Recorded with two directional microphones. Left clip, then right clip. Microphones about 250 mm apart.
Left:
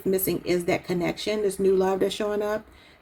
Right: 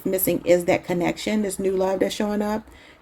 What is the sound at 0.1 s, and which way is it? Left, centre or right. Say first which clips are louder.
Speech: right 6 dB; right.